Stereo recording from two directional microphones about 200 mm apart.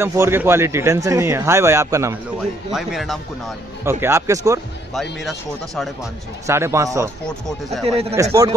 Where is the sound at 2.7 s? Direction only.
Centre (ahead or behind).